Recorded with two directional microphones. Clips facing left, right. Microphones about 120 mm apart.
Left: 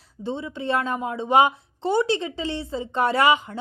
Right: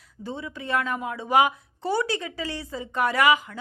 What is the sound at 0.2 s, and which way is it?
Speech, 25° left (ahead or behind).